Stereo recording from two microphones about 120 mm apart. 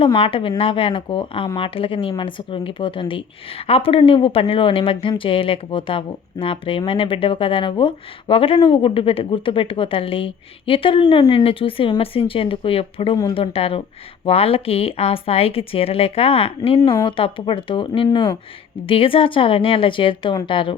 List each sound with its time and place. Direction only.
0.2 s speech: 50° left (ahead or behind)